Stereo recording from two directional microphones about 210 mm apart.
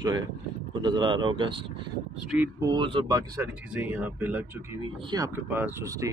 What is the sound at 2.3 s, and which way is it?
Speech, 5° right (ahead or behind).